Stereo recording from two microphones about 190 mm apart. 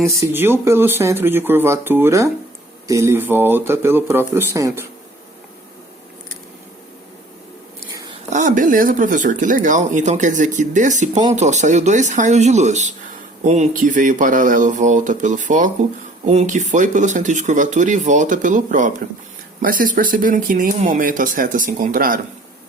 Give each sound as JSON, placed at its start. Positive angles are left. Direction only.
{"t": 0.0, "sound": "speech", "side_deg": -15}
{"t": 8.3, "sound": "speech", "side_deg": -40}